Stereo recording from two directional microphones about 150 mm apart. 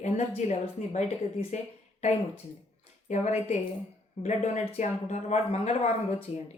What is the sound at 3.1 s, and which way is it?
Speech, 45° left (ahead or behind).